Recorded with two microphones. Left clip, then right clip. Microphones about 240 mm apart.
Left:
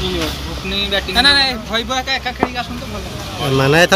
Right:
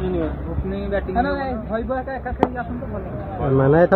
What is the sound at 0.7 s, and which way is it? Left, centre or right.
Speech, centre.